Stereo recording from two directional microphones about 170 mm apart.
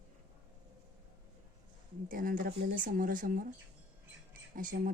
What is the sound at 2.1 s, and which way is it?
Speech, 55° right (ahead or behind).